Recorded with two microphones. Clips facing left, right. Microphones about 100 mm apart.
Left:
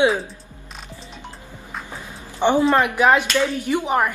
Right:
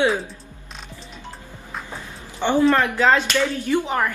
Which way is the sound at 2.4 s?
15° left (ahead or behind).